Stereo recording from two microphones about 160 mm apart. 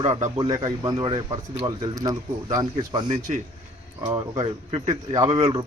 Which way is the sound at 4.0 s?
30° right (ahead or behind).